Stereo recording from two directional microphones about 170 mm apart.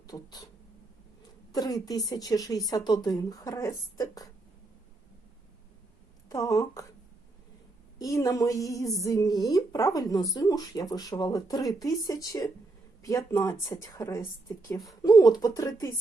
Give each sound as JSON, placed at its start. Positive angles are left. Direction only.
{"t": 0.1, "sound": "speech", "side_deg": 20}
{"t": 1.5, "sound": "speech", "side_deg": 20}
{"t": 6.2, "sound": "a woman's voice", "side_deg": 20}
{"t": 7.9, "sound": "speech", "side_deg": 20}